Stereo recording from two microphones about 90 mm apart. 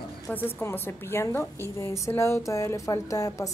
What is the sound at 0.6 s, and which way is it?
Speech, 25° left (ahead or behind).